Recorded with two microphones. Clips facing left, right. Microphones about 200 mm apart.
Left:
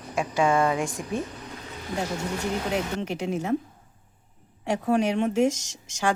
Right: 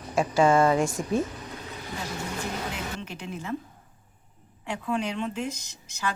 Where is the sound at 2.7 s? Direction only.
70° left (ahead or behind).